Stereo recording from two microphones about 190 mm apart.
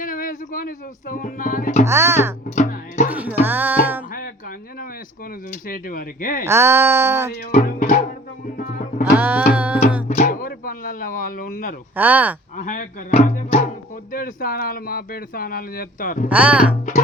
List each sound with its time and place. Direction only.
0.0 s music: 45° left (ahead or behind)
1.9 s speech: 15° right (ahead or behind)
2.6 s music: 40° left (ahead or behind)
3.1 s music: 10° right (ahead or behind)
5.6 s speech: 50° left (ahead or behind)
6.4 s speech: 15° right (ahead or behind)
7.5 s speech: 40° left (ahead or behind)
9.1 s speech: 10° right (ahead or behind)
9.6 s music: 10° right (ahead or behind)
10.2 s speech: 45° left (ahead or behind)
11.9 s speech: 10° right (ahead or behind)
12.5 s speech: 40° left (ahead or behind)
16.3 s speech: 5° right (ahead or behind)